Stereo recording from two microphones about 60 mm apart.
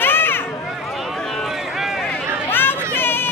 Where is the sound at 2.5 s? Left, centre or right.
Left.